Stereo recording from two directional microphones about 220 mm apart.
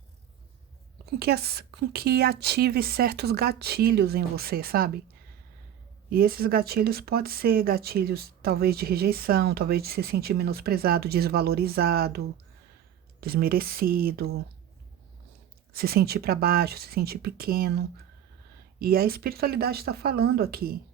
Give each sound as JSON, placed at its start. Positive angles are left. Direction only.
{"t": 1.2, "sound": "speech", "side_deg": -45}
{"t": 6.1, "sound": "speech", "side_deg": -40}
{"t": 15.7, "sound": "speech", "side_deg": -45}